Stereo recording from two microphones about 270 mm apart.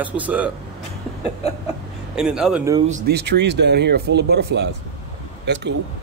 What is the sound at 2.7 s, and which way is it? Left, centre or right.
Speech, right.